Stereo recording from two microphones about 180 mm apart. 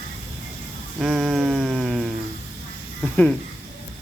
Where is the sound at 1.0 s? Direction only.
Centre (ahead or behind).